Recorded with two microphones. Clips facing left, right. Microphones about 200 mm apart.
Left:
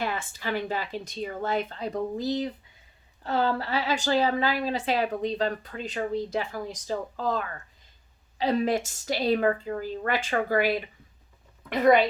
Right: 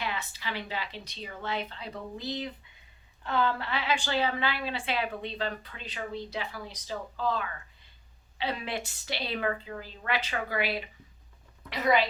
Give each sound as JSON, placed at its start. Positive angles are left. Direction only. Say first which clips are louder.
{"t": 0.0, "sound": "a woman's voice", "louder": "left 5 dB", "side_deg": 50}